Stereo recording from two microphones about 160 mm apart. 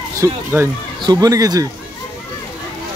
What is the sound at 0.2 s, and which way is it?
Speech, 15° right (ahead or behind).